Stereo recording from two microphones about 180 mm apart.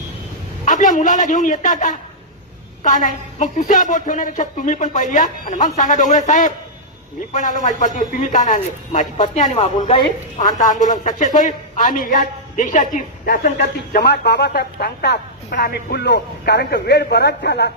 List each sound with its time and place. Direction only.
0.6 s a woman's voice: 45° left (ahead or behind)
14.0 s a woman's voice: 70° left (ahead or behind)